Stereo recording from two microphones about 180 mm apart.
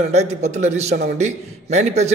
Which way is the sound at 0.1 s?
40° right (ahead or behind).